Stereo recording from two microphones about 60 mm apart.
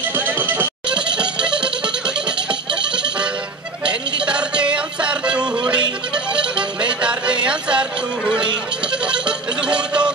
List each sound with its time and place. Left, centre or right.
0.1 s a sound: right
0.8 s music: centre
9.0 s music: centre